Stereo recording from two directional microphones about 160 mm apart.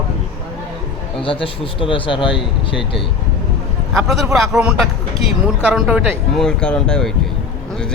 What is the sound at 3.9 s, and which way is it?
Speech, centre (ahead or behind).